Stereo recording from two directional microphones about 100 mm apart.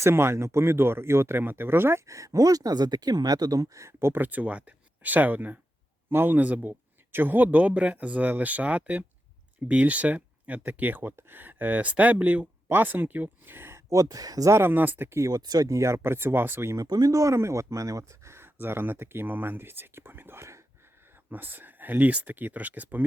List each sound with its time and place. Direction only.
0.0 s speech: 25° right (ahead or behind)
14.6 s speech: 20° right (ahead or behind)
15.3 s speech: 40° right (ahead or behind)
16.8 s speech: 40° right (ahead or behind); by 23.0 s 15° right (ahead or behind)